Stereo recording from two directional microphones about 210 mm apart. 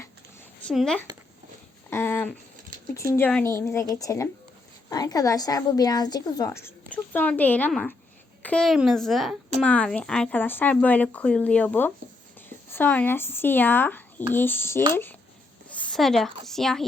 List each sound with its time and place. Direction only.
0.6 s a woman's voice: centre (ahead or behind)
15.9 s a woman's voice: centre (ahead or behind)